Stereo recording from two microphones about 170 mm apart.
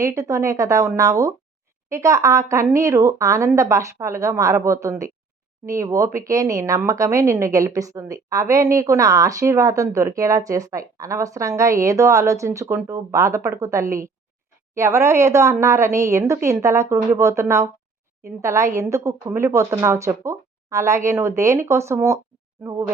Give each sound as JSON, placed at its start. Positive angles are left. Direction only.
{"t": 0.0, "sound": "a woman's voice", "side_deg": -20}